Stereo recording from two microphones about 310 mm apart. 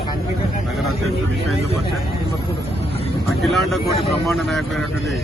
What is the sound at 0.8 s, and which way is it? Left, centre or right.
Speech, centre.